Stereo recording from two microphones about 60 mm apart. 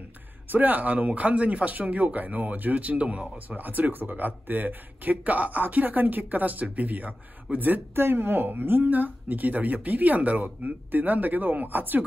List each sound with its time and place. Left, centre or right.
0.5 s speech: right